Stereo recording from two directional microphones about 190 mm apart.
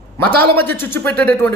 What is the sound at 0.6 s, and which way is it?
Speech, 10° left (ahead or behind).